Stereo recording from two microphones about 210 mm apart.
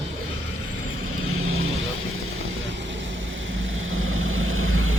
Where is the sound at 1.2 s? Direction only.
80° right.